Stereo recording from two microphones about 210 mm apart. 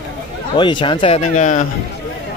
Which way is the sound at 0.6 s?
25° left (ahead or behind).